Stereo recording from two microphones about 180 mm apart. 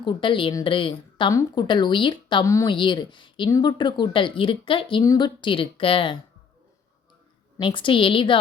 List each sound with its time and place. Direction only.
0.0 s speech: 25° left (ahead or behind)
7.6 s speech: 25° left (ahead or behind)